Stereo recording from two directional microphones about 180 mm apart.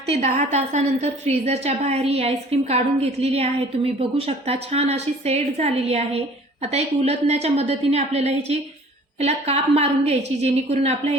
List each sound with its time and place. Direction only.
0.2 s a woman's voice: 40° right (ahead or behind)